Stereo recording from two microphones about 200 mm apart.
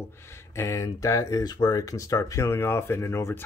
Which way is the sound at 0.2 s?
15° left (ahead or behind).